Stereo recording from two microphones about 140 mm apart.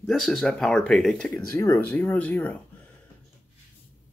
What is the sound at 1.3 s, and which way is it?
Speech, 20° left (ahead or behind).